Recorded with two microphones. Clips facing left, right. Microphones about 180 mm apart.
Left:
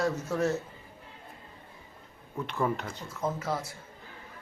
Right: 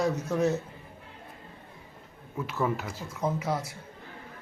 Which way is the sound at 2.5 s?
5° right (ahead or behind).